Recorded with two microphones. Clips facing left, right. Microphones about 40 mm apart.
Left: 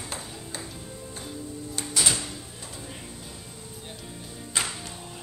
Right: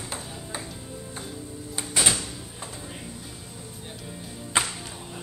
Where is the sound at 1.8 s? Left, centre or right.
Right.